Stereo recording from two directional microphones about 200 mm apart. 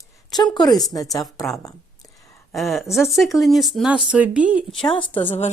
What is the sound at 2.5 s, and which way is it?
A woman's voice, centre (ahead or behind).